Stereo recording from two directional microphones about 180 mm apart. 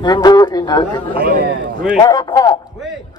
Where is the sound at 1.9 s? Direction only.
20° left (ahead or behind).